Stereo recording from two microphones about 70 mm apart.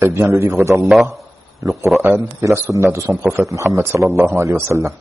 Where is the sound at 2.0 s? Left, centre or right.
Right.